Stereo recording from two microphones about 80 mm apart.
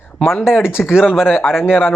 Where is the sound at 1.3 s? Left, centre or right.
Left.